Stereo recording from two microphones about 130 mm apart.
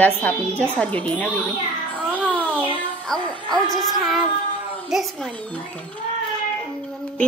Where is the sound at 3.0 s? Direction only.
5° left (ahead or behind).